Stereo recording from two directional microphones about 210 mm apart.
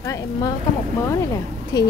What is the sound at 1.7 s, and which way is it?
Speech, 20° left (ahead or behind).